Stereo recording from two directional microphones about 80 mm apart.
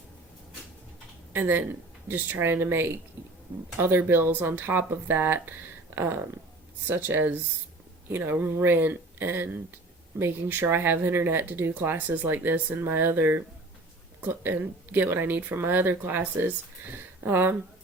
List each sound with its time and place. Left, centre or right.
1.3 s speech: right